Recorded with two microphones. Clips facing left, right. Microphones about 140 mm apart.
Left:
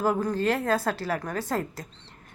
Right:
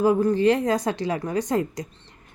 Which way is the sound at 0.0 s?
10° right (ahead or behind).